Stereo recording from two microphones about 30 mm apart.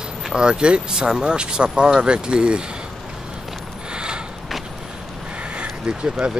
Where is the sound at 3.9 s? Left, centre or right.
Right.